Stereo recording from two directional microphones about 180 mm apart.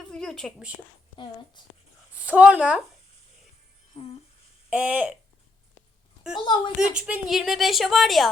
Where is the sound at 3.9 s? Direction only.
30° left (ahead or behind).